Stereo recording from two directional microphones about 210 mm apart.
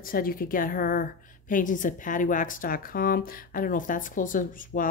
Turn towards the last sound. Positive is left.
turn(degrees=40)  # may be behind; listen again after turning